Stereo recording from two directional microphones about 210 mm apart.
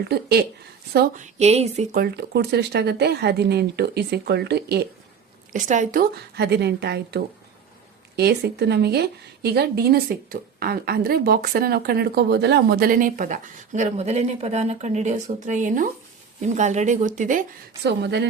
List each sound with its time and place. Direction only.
0.1 s a woman's voice: 50° right (ahead or behind)
0.9 s a woman's voice: 35° right (ahead or behind)
2.0 s a woman's voice: 50° right (ahead or behind)
5.5 s a woman's voice: 35° right (ahead or behind)
17.8 s speech: 55° right (ahead or behind)